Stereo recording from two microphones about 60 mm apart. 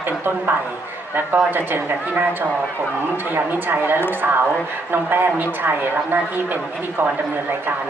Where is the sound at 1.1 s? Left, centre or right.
Right.